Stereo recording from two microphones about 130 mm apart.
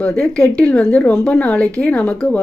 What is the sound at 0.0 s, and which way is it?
Speech, 5° left (ahead or behind).